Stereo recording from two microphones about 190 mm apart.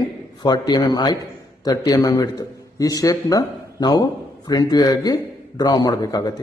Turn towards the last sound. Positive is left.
turn(degrees=20)  # may be behind; listen again after turning